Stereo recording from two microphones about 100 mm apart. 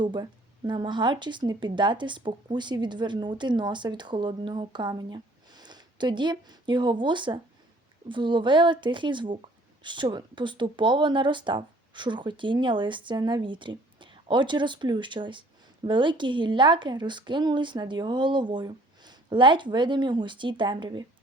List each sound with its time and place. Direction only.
0.0 s a woman's voice: 45° right (ahead or behind)